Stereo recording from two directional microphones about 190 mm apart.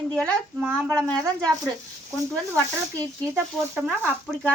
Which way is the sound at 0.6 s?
10° right (ahead or behind).